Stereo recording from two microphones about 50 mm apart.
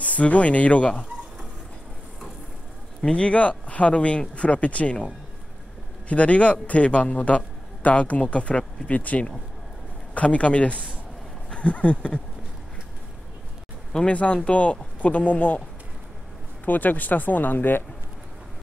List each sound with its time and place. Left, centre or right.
0.0 s a man's voice: left
3.0 s a man's voice: left
11.5 s a sound: left
13.9 s a man's voice: left
16.6 s speech: left